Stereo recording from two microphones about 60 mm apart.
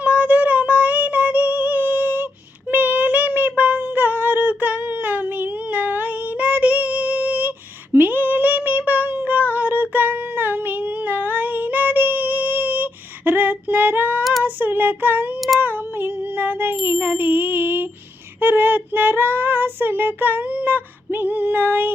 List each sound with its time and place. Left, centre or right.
0.0 s music: right
2.6 s child singing: right
3.6 s a sound: right
7.9 s female singing: right
14.4 s child singing: right
15.4 s child singing: centre
15.6 s a sound: right
16.8 s ding: right
18.3 s child singing: right